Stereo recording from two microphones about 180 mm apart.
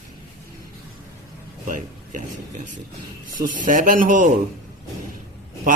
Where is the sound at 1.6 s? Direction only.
45° right (ahead or behind).